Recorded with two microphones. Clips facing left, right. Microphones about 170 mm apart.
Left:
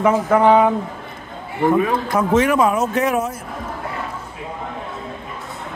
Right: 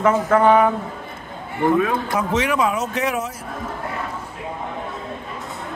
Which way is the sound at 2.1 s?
50° left (ahead or behind).